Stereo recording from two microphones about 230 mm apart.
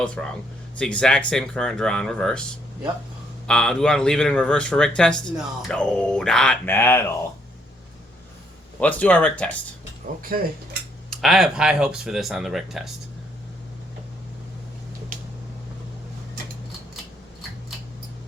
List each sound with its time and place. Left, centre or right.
0.0 s a man's voice: centre
3.4 s a man's voice: centre
8.8 s speech: centre
10.3 s speech: right
11.1 s a man's voice: centre